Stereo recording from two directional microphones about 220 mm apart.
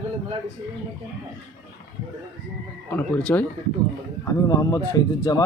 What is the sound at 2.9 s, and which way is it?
Speech, 5° left (ahead or behind).